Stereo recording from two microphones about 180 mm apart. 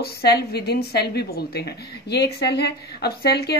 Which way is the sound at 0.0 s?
60° left (ahead or behind).